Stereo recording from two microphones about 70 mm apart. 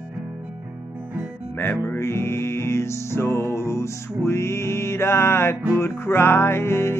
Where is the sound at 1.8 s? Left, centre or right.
Left.